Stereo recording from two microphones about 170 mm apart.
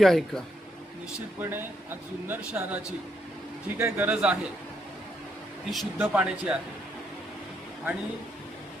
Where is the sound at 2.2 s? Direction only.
10° right (ahead or behind).